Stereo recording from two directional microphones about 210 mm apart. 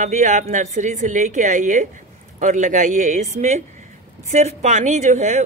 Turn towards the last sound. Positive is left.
turn(degrees=-35)  # may be behind; listen again after turning